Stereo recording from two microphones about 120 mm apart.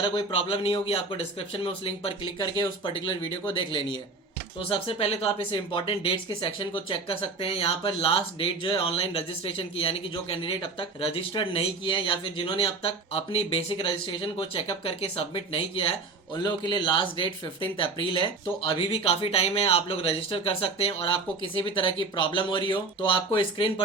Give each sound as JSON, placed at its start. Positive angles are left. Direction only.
{"t": 0.0, "sound": "speech", "side_deg": 45}
{"t": 16.4, "sound": "speech", "side_deg": 40}